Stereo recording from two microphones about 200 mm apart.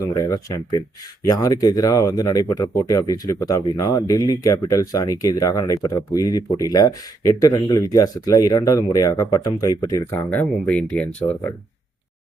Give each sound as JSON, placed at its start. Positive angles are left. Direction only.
{"t": 0.0, "sound": "speech", "side_deg": 15}